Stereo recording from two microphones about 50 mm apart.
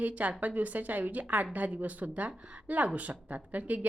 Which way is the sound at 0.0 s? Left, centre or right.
Right.